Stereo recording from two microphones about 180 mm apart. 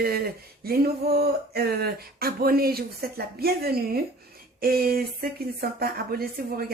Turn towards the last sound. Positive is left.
turn(degrees=-55)  # may be behind; listen again after turning